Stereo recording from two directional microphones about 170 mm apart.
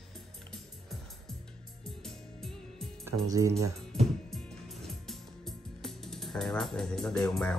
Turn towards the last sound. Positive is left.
turn(degrees=5)  # may be behind; listen again after turning